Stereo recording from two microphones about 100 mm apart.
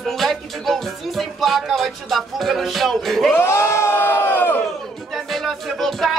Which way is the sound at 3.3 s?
30° left (ahead or behind).